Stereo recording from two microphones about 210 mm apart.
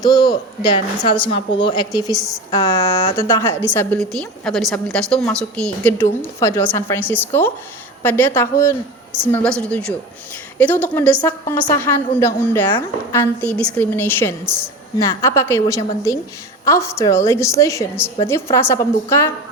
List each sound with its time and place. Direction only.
0.0 s a woman's voice: 20° left (ahead or behind)